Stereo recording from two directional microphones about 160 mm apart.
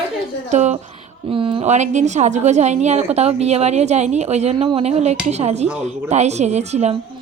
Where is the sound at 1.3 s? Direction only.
35° right (ahead or behind).